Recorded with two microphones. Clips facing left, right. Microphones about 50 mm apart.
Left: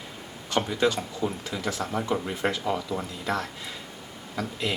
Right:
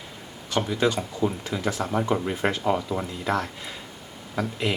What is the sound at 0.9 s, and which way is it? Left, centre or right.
Speech, centre.